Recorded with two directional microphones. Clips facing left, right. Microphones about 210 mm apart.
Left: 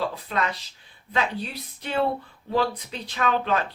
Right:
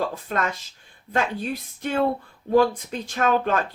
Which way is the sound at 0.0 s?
45° right (ahead or behind).